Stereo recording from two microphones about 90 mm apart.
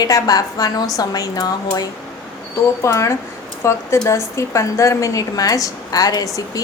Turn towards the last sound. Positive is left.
turn(degrees=40)  # may be behind; listen again after turning